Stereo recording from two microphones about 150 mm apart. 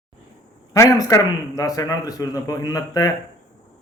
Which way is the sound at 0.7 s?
25° left (ahead or behind).